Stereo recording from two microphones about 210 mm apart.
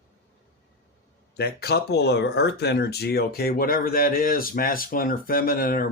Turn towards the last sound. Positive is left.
turn(degrees=45)  # may be behind; listen again after turning